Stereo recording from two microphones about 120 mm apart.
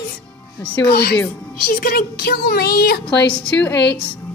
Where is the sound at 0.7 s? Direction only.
15° left (ahead or behind).